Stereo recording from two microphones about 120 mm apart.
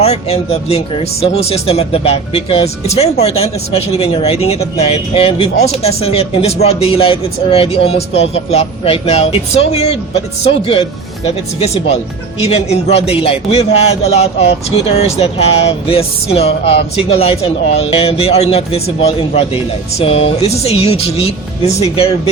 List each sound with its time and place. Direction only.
0.0 s a man's voice: 60° left (ahead or behind)